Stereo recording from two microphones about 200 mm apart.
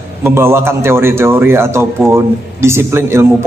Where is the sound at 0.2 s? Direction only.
10° right (ahead or behind).